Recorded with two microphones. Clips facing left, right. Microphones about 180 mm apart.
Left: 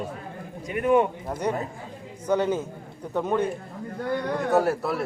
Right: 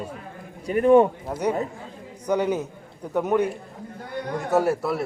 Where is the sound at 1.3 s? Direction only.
10° right (ahead or behind).